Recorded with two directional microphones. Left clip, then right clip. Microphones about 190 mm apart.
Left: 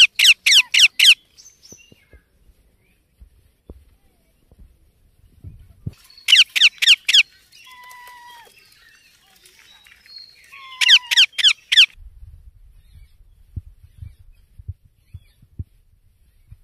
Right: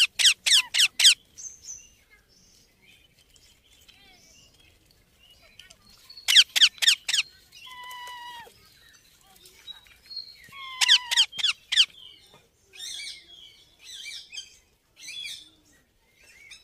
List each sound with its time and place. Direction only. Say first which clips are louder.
0.0 s squeak: left 9 dB; 40° right (ahead or behind)
6.2 s squeak: left 5 dB; 45° right (ahead or behind)
10.8 s squeak: left 8 dB; 30° right (ahead or behind)
11.3 s squeak: left 9 dB; 20° right (ahead or behind)